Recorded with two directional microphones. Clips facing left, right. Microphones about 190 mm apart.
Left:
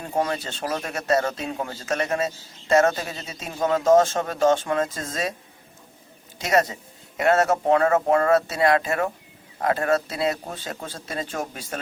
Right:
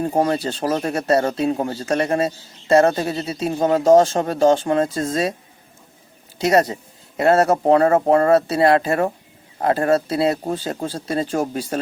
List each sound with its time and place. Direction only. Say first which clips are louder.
0.0 s speech: right 7 dB; 35° right (ahead or behind)
6.4 s speech: right 5 dB; 35° right (ahead or behind)